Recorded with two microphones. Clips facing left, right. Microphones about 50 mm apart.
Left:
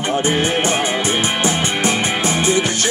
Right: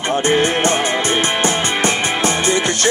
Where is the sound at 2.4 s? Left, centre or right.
Right.